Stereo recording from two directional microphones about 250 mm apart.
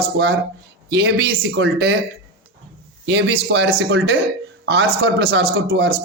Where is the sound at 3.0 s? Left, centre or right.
Right.